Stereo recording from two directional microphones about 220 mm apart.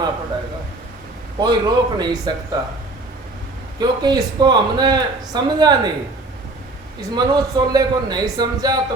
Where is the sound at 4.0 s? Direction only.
20° right (ahead or behind).